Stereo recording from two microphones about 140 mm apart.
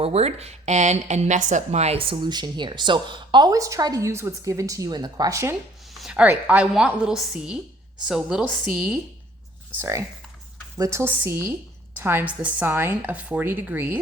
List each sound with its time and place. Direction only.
0.0 s speech: 45° right (ahead or behind); by 5.5 s 20° right (ahead or behind)
5.9 s speech: 5° right (ahead or behind)
9.7 s a woman's voice: 20° right (ahead or behind)